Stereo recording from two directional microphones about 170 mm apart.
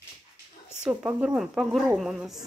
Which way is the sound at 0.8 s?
5° right (ahead or behind).